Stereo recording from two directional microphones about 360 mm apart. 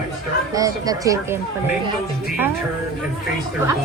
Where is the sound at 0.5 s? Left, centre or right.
Centre.